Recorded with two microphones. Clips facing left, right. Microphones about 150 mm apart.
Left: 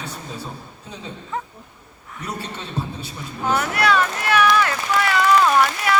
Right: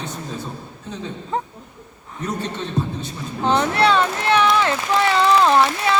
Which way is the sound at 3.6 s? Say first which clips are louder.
Right 2 dB; 25° right (ahead or behind).